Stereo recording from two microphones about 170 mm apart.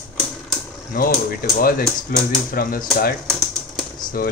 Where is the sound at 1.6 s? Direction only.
60° left (ahead or behind).